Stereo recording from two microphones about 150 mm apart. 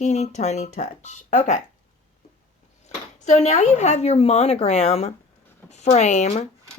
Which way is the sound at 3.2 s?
50° left (ahead or behind).